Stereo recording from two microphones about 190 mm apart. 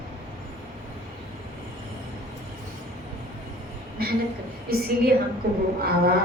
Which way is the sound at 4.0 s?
55° right (ahead or behind).